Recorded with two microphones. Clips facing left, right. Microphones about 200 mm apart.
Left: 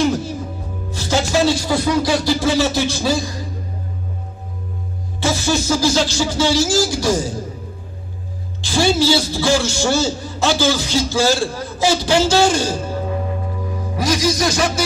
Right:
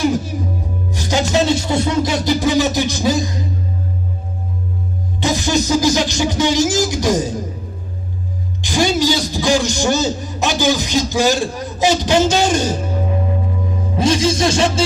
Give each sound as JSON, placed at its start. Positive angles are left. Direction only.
{"t": 0.0, "sound": "music", "side_deg": -10}
{"t": 5.2, "sound": "music", "side_deg": -15}
{"t": 8.5, "sound": "a man's voice", "side_deg": -15}
{"t": 13.7, "sound": "music", "side_deg": -25}